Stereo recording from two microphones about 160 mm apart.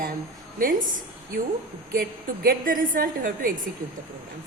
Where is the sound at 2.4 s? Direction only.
60° right (ahead or behind).